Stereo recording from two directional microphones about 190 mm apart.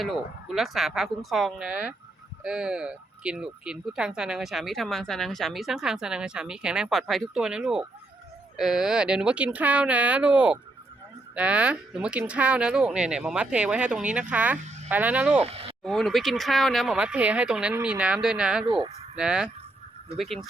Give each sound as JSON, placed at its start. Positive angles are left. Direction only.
{"t": 0.0, "sound": "speech", "side_deg": 0}
{"t": 18.6, "sound": "speech", "side_deg": -25}
{"t": 19.1, "sound": "speech", "side_deg": -5}